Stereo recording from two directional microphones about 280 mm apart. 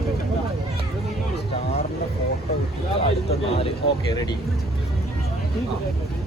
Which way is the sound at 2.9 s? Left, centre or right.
Centre.